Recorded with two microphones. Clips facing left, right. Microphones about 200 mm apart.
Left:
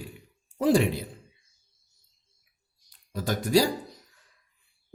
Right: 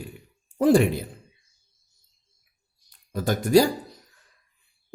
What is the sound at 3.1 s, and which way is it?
Speech, 50° right (ahead or behind).